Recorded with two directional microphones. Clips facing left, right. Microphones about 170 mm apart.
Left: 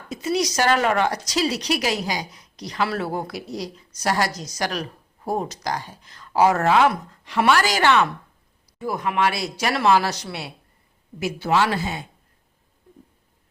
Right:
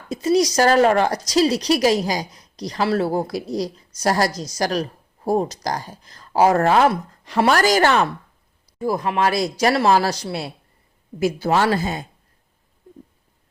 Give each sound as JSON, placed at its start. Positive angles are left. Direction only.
{"t": 0.1, "sound": "speech", "side_deg": -35}